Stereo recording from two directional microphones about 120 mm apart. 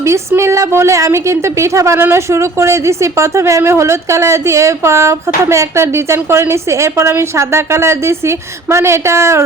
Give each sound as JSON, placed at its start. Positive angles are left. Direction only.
{"t": 0.0, "sound": "a woman's voice", "side_deg": -25}